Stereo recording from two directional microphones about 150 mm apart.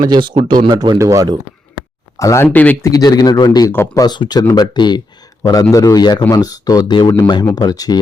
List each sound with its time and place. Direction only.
0.0 s speech: 30° right (ahead or behind)
0.9 s speech: 20° right (ahead or behind)
2.1 s speech: 20° left (ahead or behind)
2.9 s speech: 25° left (ahead or behind)
3.7 s speech: 15° left (ahead or behind)
4.0 s speech: 30° left (ahead or behind)